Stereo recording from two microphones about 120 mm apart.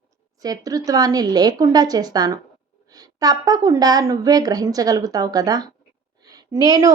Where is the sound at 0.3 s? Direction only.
30° right (ahead or behind).